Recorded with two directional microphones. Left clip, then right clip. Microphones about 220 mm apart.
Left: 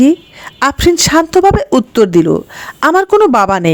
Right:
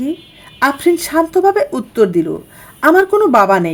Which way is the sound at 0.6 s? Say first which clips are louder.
Left 3 dB; 35° left (ahead or behind).